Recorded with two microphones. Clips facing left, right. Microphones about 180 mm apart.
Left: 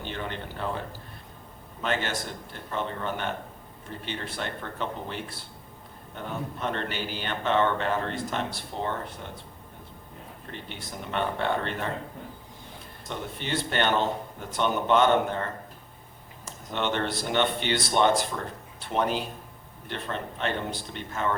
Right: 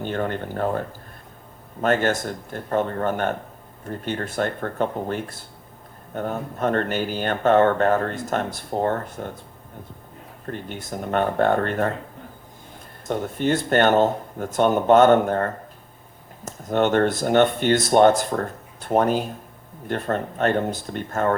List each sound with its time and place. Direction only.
0.0 s speech: 45° right (ahead or behind)
10.4 s speech: 45° right (ahead or behind)
13.1 s speech: 45° right (ahead or behind)